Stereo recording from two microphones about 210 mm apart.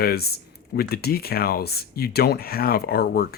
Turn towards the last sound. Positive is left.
turn(degrees=45)  # may be behind; listen again after turning